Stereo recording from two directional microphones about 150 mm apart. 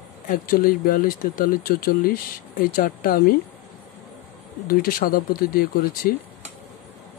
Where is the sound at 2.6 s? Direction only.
70° left (ahead or behind).